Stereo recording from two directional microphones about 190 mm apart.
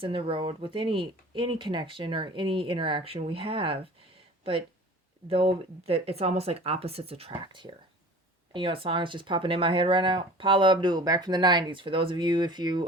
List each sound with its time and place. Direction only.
0.0 s speech: 30° right (ahead or behind)
5.3 s speech: 30° right (ahead or behind)